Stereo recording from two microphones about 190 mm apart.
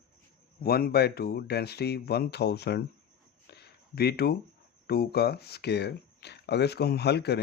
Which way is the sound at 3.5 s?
60° left (ahead or behind).